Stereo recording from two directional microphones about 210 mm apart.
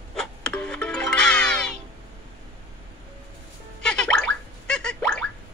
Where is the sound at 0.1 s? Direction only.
5° left (ahead or behind).